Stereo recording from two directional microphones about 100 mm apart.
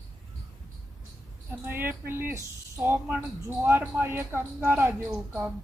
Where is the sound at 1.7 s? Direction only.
20° right (ahead or behind).